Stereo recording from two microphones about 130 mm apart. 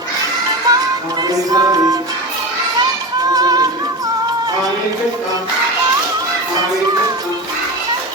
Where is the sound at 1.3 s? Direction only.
30° right (ahead or behind).